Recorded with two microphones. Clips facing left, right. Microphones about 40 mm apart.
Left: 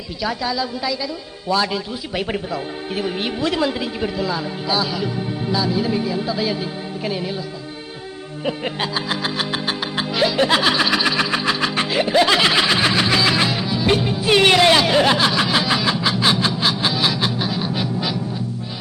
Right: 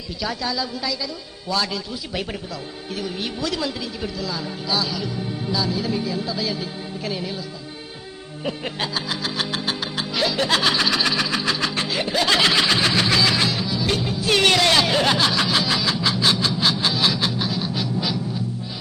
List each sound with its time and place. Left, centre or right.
0.2 s music: centre
1.5 s speech: centre
2.3 s speech: left
8.4 s music: centre